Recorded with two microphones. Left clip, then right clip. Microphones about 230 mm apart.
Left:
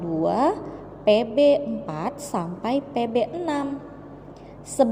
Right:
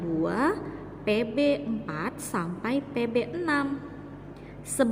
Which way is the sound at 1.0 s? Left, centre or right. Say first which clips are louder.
Left 8 dB; centre.